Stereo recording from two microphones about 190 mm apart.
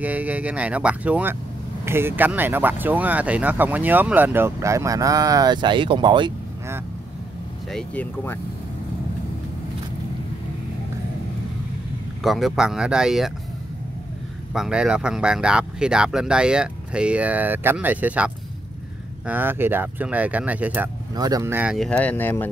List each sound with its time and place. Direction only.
0.0 s speech: 10° right (ahead or behind); by 6.3 s 25° right (ahead or behind)
7.7 s speech: 10° left (ahead or behind)
12.2 s speech: centre (ahead or behind)
14.5 s speech: 5° right (ahead or behind)
21.1 s speech: 20° right (ahead or behind)
21.7 s speech: 5° left (ahead or behind)